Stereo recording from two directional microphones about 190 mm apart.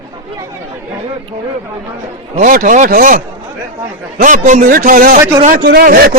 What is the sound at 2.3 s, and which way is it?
A man's voice, 45° right (ahead or behind).